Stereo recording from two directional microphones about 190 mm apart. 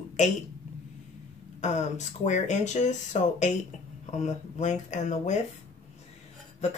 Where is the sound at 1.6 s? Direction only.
40° left (ahead or behind).